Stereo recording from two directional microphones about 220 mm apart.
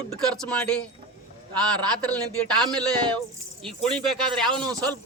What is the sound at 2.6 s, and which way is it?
Speech, 5° left (ahead or behind).